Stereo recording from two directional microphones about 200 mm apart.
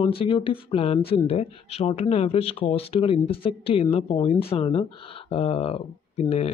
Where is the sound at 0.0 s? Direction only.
25° left (ahead or behind).